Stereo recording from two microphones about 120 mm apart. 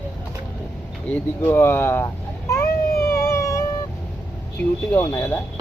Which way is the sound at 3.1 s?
25° left (ahead or behind).